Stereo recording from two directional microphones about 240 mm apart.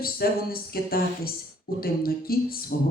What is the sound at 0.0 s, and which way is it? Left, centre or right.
Speech, left.